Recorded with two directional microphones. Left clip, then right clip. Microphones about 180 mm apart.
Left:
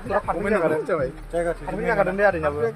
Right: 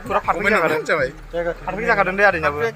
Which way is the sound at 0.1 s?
15° right (ahead or behind).